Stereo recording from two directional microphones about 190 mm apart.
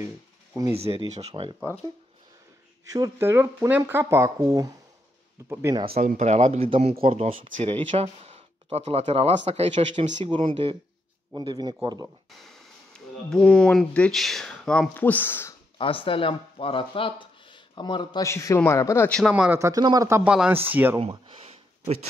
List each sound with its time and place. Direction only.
0.7 s speech: 30° right (ahead or behind)
2.9 s speech: 15° right (ahead or behind)
5.9 s speech: 35° right (ahead or behind); by 12.1 s 20° right (ahead or behind)
12.4 s speech: 5° left (ahead or behind)
15.8 s speech: 30° left (ahead or behind); by 19.6 s 5° right (ahead or behind)
19.6 s speech: 20° right (ahead or behind)
21.0 s a sound: 30° right (ahead or behind)